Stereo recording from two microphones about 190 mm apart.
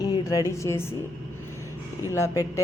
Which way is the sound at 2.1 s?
15° left (ahead or behind).